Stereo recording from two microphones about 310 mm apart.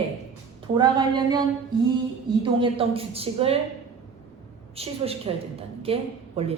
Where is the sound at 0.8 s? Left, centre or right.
Centre.